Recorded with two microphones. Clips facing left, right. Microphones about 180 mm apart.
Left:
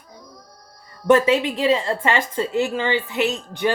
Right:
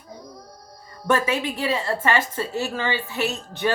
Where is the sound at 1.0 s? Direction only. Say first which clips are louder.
Left 6 dB; 20° left (ahead or behind).